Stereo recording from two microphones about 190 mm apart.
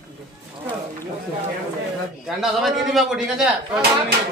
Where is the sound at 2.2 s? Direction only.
Centre (ahead or behind).